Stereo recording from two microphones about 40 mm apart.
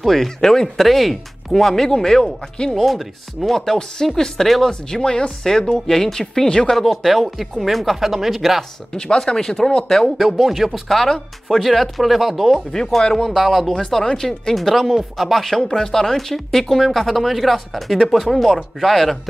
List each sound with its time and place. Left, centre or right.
0.0 s speech: centre
0.8 s speech: centre
2.7 s speech: centre
6.7 s speech: centre
8.9 s speech: centre
10.1 s speech: centre
13.7 s speech: centre
14.5 s speech: centre